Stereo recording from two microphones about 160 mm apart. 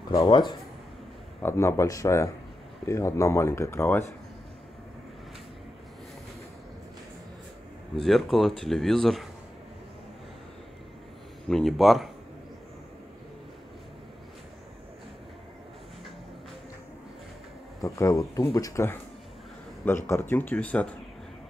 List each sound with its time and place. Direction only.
0.1 s speech: 25° left (ahead or behind)
7.9 s speech: centre (ahead or behind)
11.4 s speech: centre (ahead or behind)
17.8 s speech: 20° left (ahead or behind)
20.1 s speech: 15° left (ahead or behind)